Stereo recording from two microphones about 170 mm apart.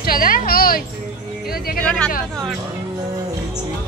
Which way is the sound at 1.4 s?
60° left (ahead or behind).